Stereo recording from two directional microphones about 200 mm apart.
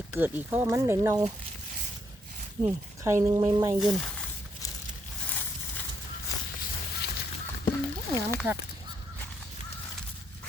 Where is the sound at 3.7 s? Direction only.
Centre (ahead or behind).